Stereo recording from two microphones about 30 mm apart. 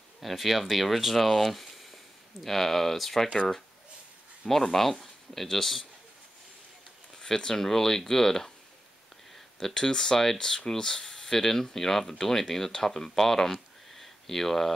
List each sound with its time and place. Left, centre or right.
0.2 s speech: centre
4.5 s speech: centre
7.2 s speech: centre
9.8 s speech: left
10.2 s speech: centre
10.8 s speech: centre